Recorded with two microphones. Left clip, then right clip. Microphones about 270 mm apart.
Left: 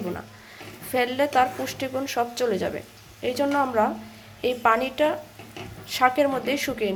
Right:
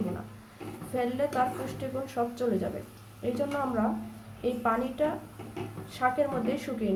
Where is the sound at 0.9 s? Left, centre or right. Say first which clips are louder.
Left 7 dB; left.